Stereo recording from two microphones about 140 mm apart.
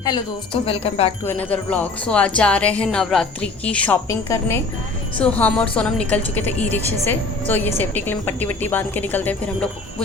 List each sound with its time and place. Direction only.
0.6 s speech: 45° left (ahead or behind)
1.2 s music: 15° left (ahead or behind)